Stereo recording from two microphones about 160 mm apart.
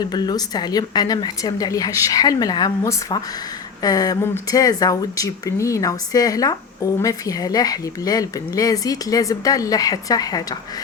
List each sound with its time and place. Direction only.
0.0 s speech: 25° left (ahead or behind)